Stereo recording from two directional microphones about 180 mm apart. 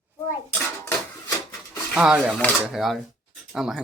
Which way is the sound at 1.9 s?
5° right (ahead or behind).